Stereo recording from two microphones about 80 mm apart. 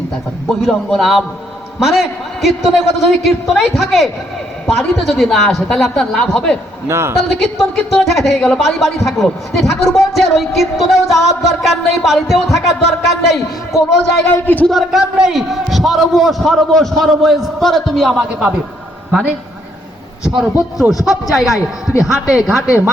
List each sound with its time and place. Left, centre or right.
0.6 s a man's voice: centre
6.8 s a woman's voice: right
7.2 s a man's voice: centre
14.4 s speech: left
14.7 s a man's voice: centre
20.3 s a man's voice: centre